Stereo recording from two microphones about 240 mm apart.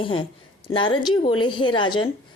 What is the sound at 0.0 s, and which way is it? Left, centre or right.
A woman's voice, left.